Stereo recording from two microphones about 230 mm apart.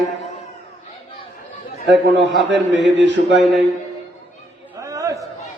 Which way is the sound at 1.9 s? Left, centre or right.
Right.